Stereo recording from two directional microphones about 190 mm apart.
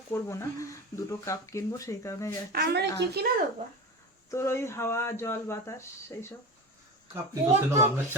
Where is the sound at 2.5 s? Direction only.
55° right (ahead or behind).